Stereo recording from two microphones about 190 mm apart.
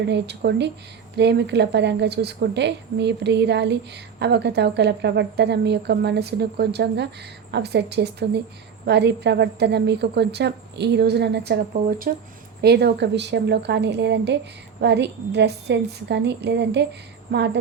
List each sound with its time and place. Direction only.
0.1 s speech: 60° right (ahead or behind)
12.6 s speech: 60° right (ahead or behind)